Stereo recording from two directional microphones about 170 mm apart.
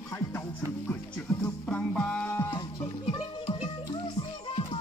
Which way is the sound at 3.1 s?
25° left (ahead or behind).